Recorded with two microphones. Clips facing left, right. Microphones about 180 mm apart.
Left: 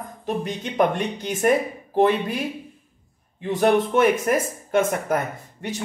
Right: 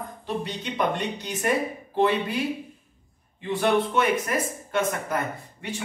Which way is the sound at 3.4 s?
45° left (ahead or behind).